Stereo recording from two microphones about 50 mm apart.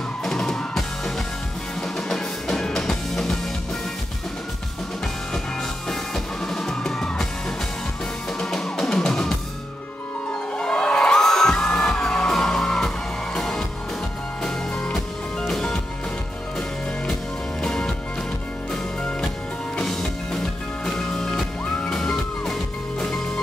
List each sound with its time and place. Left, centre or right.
0.2 s drum kit: centre
1.8 s music: centre
5.9 s music: centre
10.6 s music: centre
17.1 s music: centre
19.8 s music: centre